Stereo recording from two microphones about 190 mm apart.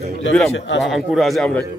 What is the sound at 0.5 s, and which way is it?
Speech, 70° left (ahead or behind).